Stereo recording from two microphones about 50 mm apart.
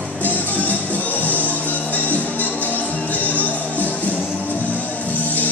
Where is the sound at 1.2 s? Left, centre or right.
Right.